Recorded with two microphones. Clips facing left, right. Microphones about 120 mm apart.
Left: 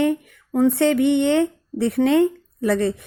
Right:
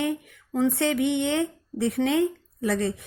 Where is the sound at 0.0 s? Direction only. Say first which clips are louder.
Left 7 dB; 55° left (ahead or behind).